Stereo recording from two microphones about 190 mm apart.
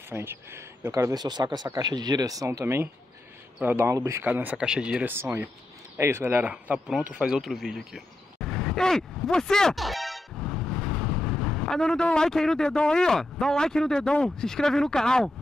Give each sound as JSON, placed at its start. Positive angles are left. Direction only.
{"t": 0.1, "sound": "speech", "side_deg": -10}